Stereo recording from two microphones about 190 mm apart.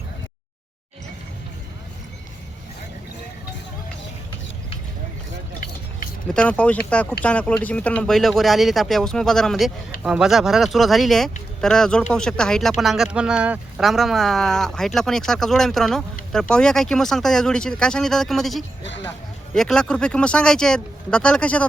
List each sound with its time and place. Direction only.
6.3 s speech: 5° left (ahead or behind)
18.8 s speech: 70° left (ahead or behind)
19.5 s speech: 5° left (ahead or behind)